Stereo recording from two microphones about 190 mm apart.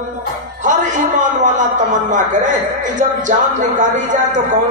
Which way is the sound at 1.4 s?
40° right (ahead or behind).